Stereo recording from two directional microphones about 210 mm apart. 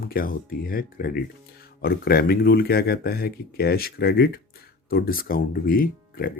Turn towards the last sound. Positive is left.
turn(degrees=45)  # may be behind; listen again after turning